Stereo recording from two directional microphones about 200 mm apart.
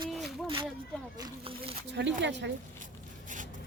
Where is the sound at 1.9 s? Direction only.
60° right (ahead or behind).